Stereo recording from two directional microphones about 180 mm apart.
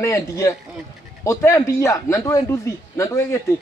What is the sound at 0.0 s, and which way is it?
A man's voice, 15° left (ahead or behind).